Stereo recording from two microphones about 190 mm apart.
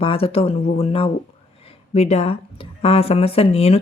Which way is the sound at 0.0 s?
30° left (ahead or behind).